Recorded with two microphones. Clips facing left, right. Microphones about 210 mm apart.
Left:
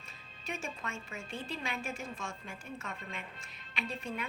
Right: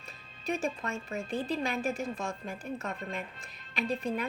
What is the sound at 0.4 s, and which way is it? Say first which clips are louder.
A woman's voice: right 8 dB; 35° right (ahead or behind).